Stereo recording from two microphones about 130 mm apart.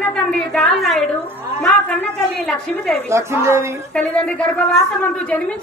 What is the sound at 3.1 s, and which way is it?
Speech, 20° right (ahead or behind).